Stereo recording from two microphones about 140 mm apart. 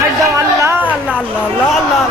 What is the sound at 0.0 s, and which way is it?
Chatter, 20° right (ahead or behind).